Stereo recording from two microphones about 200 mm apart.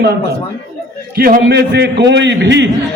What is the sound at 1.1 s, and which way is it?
A man's voice, 50° right (ahead or behind).